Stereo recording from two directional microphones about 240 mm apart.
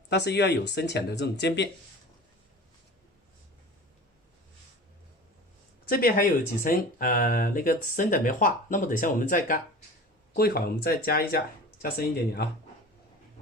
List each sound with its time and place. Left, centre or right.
0.1 s speech: left
5.9 s speech: left